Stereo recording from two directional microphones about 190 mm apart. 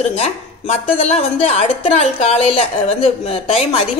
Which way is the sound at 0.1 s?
35° left (ahead or behind).